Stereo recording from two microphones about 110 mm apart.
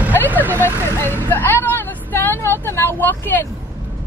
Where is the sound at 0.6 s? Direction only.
25° left (ahead or behind).